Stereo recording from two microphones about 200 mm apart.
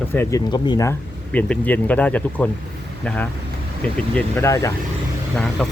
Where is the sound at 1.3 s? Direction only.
5° left (ahead or behind).